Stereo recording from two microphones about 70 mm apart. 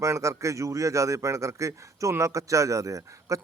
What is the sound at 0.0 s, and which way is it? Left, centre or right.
Speech, right.